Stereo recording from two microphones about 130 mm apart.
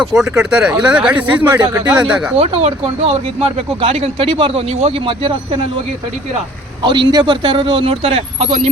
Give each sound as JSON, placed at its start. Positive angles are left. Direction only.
{"t": 0.0, "sound": "a man's voice", "side_deg": -5}
{"t": 2.4, "sound": "speech", "side_deg": -55}
{"t": 6.8, "sound": "a man's voice", "side_deg": -35}